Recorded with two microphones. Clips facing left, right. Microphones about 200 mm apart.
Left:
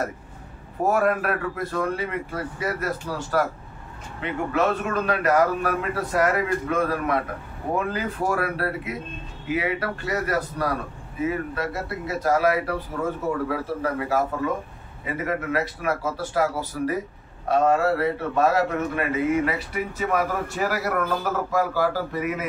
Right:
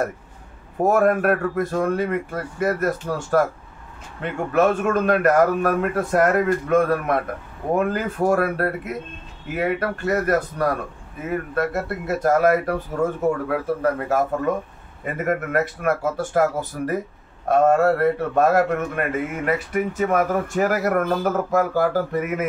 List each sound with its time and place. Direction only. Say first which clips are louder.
0.8 s a man's voice: right 4 dB; 45° right (ahead or behind)